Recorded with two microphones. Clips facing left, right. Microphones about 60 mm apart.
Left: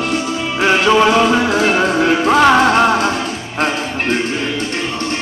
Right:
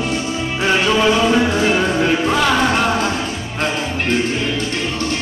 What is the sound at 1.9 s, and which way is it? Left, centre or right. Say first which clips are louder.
Music: left 3 dB; left.